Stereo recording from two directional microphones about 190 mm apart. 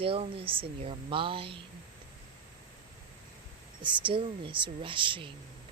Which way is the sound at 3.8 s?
25° right (ahead or behind).